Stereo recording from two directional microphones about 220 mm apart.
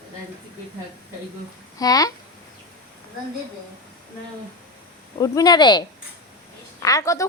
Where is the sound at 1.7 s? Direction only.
15° left (ahead or behind).